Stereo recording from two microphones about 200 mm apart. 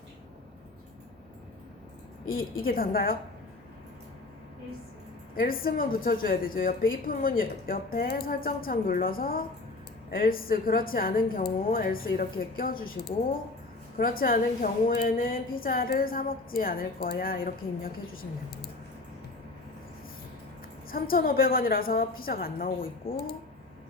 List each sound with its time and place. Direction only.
2.6 s a woman's voice: 45° left (ahead or behind)
5.3 s a woman's voice: 45° left (ahead or behind)
20.9 s a woman's voice: 45° left (ahead or behind)